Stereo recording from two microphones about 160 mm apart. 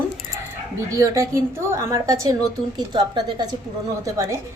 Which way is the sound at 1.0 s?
20° right (ahead or behind).